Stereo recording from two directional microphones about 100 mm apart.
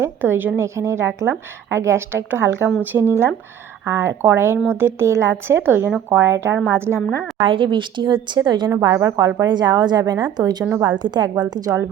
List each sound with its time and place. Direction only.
0.0 s a woman's voice: 20° right (ahead or behind)
7.4 s a woman's voice: 55° right (ahead or behind)
8.8 s a woman's voice: 35° right (ahead or behind)
9.5 s a woman's voice: 45° right (ahead or behind)